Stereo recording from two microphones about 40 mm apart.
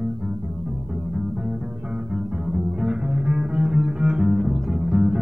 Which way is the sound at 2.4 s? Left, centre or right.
Centre.